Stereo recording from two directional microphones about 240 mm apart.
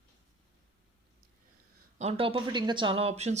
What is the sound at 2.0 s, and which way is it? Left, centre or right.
Speech, right.